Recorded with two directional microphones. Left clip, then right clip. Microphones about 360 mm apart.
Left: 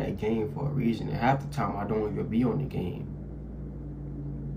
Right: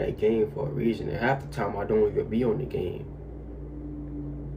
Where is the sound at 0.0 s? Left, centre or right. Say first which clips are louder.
Right 6 dB; left.